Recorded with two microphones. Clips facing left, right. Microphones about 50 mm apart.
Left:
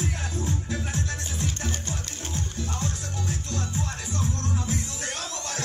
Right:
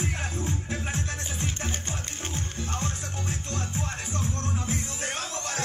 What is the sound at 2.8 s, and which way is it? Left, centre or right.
Music, right.